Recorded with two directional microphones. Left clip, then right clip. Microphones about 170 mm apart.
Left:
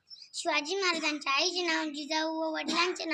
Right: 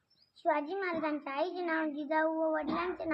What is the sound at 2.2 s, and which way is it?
Child singing, 30° left (ahead or behind).